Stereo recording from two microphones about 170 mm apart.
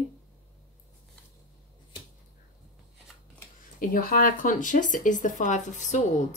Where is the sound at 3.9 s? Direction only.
55° left (ahead or behind).